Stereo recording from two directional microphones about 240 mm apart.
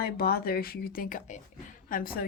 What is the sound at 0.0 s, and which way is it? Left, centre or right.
Speech, left.